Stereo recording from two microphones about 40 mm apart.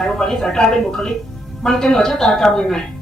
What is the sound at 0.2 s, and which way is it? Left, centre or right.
A woman's voice, centre.